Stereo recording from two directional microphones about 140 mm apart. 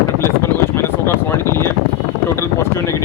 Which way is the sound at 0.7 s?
15° left (ahead or behind).